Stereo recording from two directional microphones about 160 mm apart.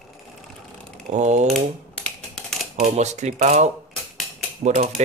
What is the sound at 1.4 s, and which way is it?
Typing, 5° left (ahead or behind).